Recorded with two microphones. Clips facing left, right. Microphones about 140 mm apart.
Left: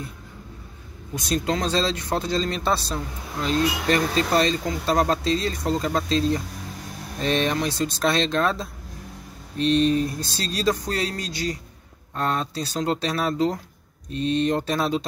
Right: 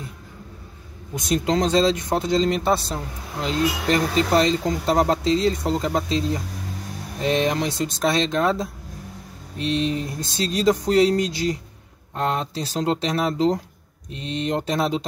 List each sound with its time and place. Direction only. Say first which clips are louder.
1.1 s speech: right 3 dB; 20° right (ahead or behind)